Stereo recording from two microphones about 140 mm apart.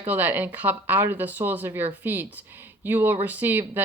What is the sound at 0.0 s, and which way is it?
Speech, 10° right (ahead or behind).